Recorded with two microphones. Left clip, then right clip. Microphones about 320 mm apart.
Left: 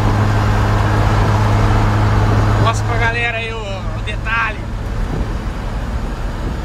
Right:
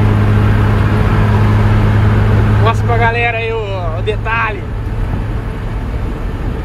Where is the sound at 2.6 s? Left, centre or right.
Centre.